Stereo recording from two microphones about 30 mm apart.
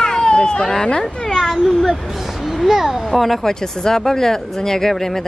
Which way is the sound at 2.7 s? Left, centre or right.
Centre.